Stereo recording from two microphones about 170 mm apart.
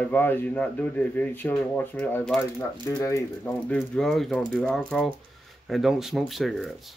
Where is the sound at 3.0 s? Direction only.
20° left (ahead or behind).